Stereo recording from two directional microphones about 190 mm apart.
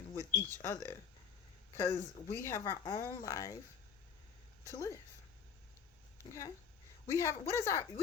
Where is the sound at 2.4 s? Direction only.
15° left (ahead or behind).